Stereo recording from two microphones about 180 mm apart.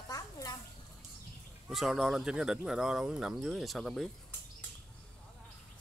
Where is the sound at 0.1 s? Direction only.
20° left (ahead or behind).